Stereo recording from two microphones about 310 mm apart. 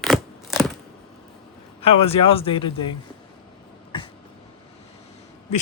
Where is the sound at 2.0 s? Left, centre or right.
Centre.